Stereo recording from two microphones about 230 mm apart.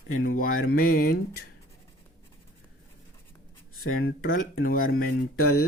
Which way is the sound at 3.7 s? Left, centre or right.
Left.